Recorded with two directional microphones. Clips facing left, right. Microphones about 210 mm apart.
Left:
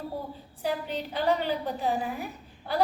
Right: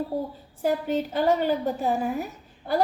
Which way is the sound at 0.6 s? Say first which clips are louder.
Right 6 dB; 45° right (ahead or behind).